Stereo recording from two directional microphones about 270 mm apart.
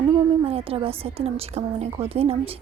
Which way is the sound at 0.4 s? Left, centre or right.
Right.